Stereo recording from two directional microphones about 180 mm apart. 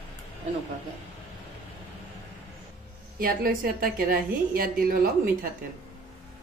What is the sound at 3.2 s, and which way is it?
A woman's voice, 55° right (ahead or behind).